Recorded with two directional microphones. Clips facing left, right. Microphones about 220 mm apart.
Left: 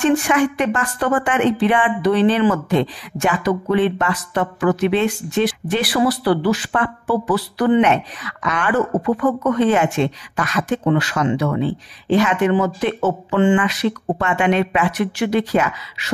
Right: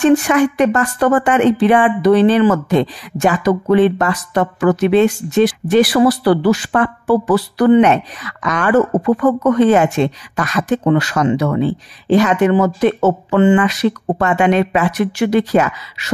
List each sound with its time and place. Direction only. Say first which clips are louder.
0.3 s a woman's voice: right 4 dB; 40° right (ahead or behind)